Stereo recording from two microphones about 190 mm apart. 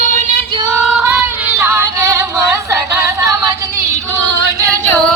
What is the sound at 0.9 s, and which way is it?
Female singing, 10° right (ahead or behind).